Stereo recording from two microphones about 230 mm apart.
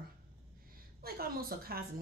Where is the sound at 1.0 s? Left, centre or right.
Right.